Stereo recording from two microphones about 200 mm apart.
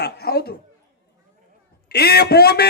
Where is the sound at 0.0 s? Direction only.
55° left (ahead or behind).